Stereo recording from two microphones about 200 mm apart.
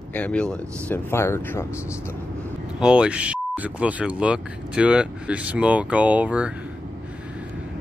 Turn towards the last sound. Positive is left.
turn(degrees=-5)  # may be behind; listen again after turning